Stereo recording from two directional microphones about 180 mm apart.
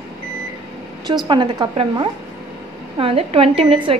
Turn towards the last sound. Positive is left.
turn(degrees=-30)  # may be behind; listen again after turning